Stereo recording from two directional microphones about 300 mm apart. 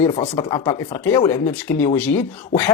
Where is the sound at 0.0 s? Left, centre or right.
Centre.